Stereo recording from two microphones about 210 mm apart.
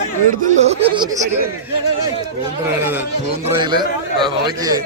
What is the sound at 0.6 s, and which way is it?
Speech, 30° right (ahead or behind).